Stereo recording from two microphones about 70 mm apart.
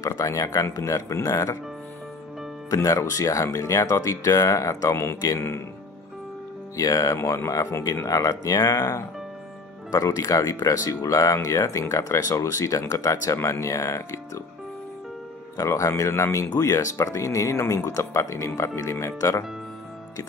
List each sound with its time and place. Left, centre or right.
0.0 s speech: left
2.7 s speech: left
5.3 s speech: left
6.8 s speech: left
7.2 s speech: left
8.1 s speech: left
15.5 s speech: left